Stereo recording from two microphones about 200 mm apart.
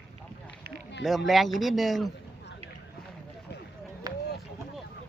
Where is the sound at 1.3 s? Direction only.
Centre (ahead or behind).